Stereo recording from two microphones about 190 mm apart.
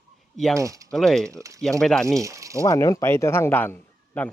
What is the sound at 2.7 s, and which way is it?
A man's voice, 15° left (ahead or behind).